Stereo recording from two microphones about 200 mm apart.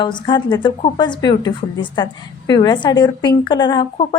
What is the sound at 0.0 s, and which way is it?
A woman's voice, 25° left (ahead or behind).